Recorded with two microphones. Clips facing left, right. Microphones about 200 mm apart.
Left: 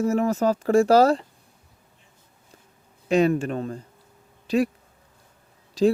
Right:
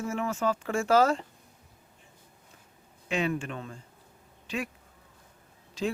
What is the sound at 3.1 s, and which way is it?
Speech, 40° left (ahead or behind).